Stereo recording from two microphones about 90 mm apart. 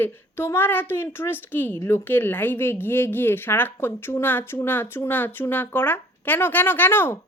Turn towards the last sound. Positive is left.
turn(degrees=25)  # may be behind; listen again after turning